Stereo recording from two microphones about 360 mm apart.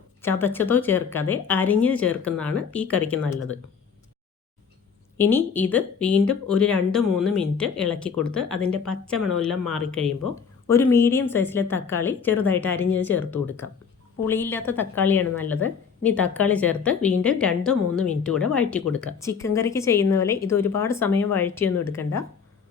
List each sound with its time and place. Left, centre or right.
0.2 s speech: centre
5.1 s speech: centre